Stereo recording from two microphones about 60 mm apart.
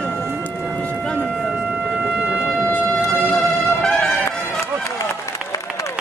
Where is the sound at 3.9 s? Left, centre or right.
Left.